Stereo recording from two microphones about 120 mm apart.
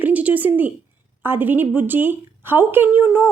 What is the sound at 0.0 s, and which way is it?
A woman's voice, 15° right (ahead or behind).